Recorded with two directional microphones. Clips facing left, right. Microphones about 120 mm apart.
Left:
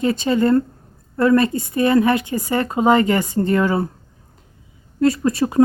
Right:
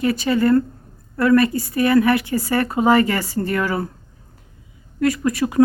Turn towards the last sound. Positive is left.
turn(degrees=30)  # may be behind; listen again after turning